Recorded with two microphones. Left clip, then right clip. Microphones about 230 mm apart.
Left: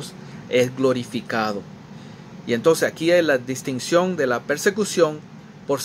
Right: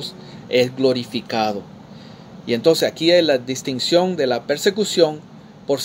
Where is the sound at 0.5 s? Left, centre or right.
Centre.